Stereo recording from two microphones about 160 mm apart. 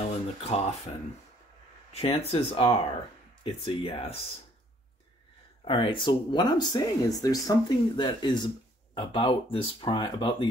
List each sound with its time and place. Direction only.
0.4 s speech: 40° left (ahead or behind)
1.9 s speech: 40° left (ahead or behind)
5.7 s speech: 30° left (ahead or behind)